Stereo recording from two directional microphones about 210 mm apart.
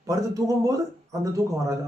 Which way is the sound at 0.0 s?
15° right (ahead or behind).